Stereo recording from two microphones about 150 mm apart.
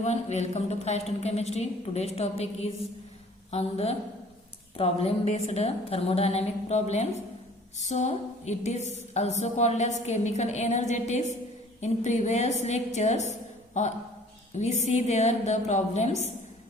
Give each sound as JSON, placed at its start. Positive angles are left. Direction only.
{"t": 0.0, "sound": "a woman's voice", "side_deg": 50}